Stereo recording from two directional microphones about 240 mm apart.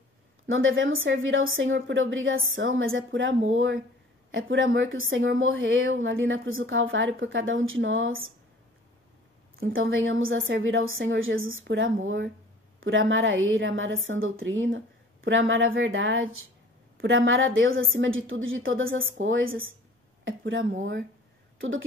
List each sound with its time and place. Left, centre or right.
0.5 s a woman's voice: right
9.8 s a woman's voice: right